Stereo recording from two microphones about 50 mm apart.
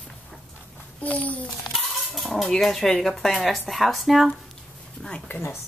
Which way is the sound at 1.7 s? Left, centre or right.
Centre.